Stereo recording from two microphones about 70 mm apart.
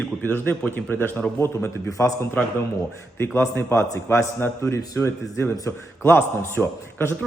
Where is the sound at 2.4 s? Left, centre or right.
Left.